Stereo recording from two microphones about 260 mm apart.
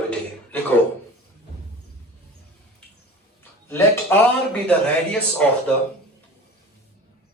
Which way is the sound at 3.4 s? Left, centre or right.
Centre.